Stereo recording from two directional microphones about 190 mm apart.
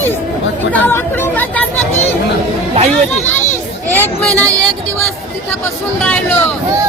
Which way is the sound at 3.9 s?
10° left (ahead or behind).